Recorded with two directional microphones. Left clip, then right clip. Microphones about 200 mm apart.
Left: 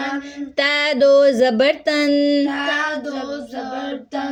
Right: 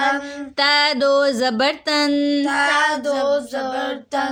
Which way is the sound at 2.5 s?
60° right (ahead or behind).